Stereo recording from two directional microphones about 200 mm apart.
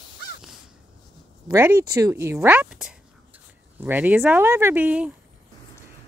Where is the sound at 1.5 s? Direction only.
15° right (ahead or behind).